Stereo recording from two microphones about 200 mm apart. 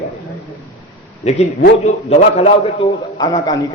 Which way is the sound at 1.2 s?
35° left (ahead or behind).